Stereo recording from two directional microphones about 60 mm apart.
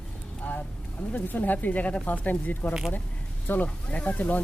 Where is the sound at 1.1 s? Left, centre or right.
Left.